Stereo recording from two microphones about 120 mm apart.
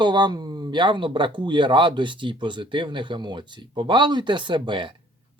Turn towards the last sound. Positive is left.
turn(degrees=-45)  # may be behind; listen again after turning